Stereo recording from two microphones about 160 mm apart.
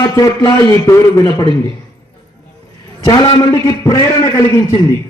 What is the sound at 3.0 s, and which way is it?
A man's voice, 25° left (ahead or behind).